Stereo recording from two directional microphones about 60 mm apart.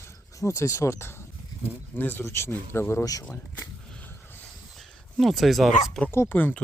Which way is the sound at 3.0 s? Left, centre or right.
Left.